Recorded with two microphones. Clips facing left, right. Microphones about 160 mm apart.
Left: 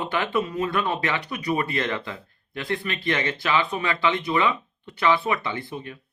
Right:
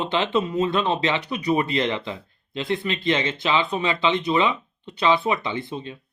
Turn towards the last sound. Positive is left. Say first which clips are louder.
# right 3 dB
turn(degrees=-20)  # may be behind; listen again after turning